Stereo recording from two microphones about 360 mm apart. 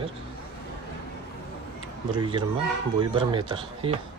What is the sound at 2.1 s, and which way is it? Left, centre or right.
Speech, centre.